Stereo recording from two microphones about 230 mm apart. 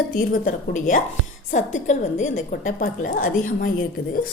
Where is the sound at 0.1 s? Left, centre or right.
Left.